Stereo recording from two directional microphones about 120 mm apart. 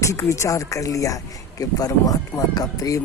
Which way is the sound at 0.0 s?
25° left (ahead or behind).